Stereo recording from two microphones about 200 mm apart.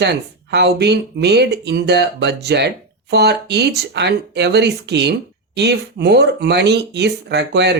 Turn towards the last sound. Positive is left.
turn(degrees=-60)  # may be behind; listen again after turning